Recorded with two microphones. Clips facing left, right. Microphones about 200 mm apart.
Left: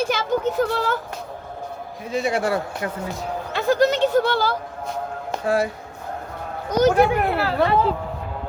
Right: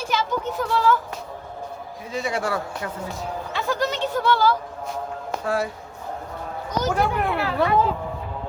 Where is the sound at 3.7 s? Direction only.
75° left (ahead or behind).